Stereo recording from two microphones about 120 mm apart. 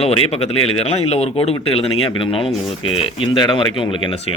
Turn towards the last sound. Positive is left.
turn(degrees=45)  # may be behind; listen again after turning